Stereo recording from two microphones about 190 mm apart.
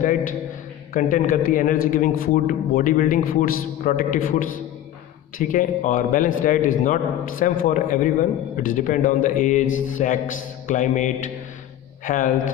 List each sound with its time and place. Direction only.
0.9 s a man's voice: 45° left (ahead or behind)